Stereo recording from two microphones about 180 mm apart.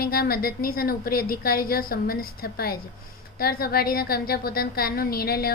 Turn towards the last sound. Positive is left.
turn(degrees=55)  # may be behind; listen again after turning